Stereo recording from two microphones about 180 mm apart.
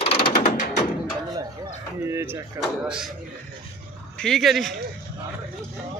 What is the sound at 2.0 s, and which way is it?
Speech, 15° right (ahead or behind).